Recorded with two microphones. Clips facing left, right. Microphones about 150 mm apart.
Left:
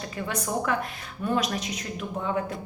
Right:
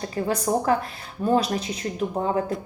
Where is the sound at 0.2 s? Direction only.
35° right (ahead or behind).